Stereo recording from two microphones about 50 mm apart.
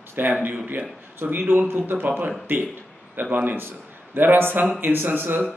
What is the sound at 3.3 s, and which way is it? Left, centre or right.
A man's voice, right.